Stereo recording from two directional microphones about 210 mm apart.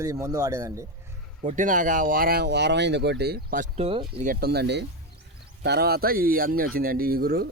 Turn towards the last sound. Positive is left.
turn(degrees=-45)  # may be behind; listen again after turning